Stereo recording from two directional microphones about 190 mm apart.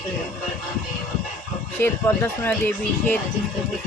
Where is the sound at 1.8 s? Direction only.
10° left (ahead or behind).